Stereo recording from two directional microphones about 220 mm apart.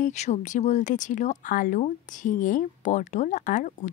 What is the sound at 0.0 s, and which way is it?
Speech, 30° left (ahead or behind).